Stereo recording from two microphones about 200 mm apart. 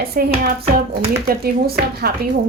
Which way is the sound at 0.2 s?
45° right (ahead or behind).